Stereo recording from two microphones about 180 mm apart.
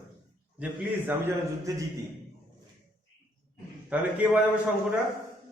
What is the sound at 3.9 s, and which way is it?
Speech, 5° right (ahead or behind).